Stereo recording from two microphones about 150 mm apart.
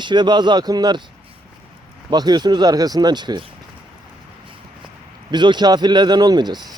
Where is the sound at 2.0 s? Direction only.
30° right (ahead or behind).